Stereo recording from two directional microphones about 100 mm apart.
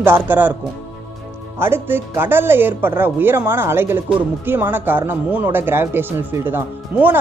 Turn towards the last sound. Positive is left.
turn(degrees=-20)  # may be behind; listen again after turning